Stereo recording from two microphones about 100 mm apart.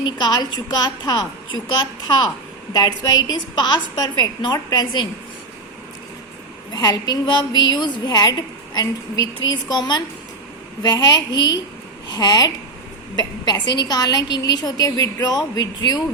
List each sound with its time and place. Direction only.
0.0 s a woman's voice: 45° left (ahead or behind)
6.7 s a woman's voice: 40° left (ahead or behind)